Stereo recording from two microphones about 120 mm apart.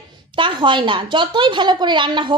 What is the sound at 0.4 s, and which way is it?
A woman's voice, 40° right (ahead or behind).